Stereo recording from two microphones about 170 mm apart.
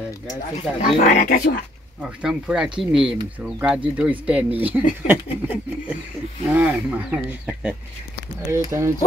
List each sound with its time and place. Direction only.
0.9 s speech: 55° left (ahead or behind)
2.2 s speech: 5° right (ahead or behind)
8.5 s speech: 15° right (ahead or behind)